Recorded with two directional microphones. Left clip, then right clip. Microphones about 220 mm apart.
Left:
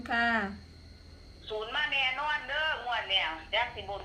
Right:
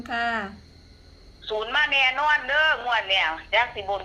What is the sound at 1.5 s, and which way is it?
A man's voice, 50° right (ahead or behind).